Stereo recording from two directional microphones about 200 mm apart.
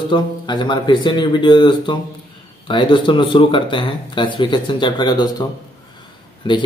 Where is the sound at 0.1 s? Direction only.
25° left (ahead or behind).